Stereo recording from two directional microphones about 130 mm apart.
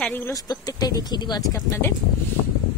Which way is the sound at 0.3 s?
30° left (ahead or behind).